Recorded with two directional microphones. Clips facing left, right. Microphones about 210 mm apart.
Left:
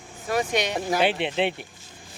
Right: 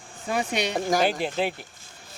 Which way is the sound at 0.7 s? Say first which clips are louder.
Right 2 dB; 40° right (ahead or behind).